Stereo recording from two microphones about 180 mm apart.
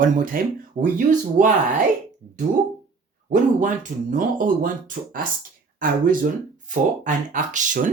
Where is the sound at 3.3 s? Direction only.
45° right (ahead or behind).